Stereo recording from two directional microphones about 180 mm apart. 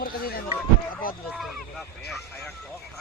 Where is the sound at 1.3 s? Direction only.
Centre (ahead or behind).